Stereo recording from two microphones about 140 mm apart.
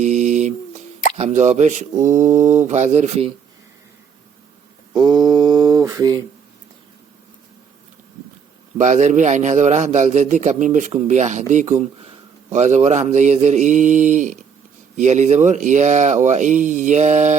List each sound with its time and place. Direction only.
0.0 s speech: 55° right (ahead or behind)
4.9 s mantra: 30° right (ahead or behind)
8.8 s a man's voice: 55° right (ahead or behind)